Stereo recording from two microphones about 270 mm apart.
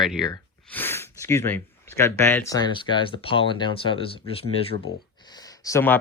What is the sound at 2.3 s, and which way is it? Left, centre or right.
Speech, centre.